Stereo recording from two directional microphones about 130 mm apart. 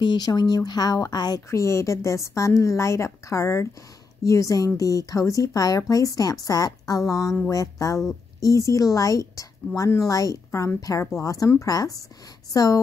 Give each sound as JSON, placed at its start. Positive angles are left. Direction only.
{"t": 0.0, "sound": "a woman's voice", "side_deg": 35}